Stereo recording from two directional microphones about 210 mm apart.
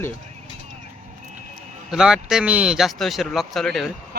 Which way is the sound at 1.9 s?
Centre (ahead or behind).